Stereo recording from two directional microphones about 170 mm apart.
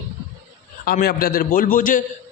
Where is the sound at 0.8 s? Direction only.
65° left (ahead or behind).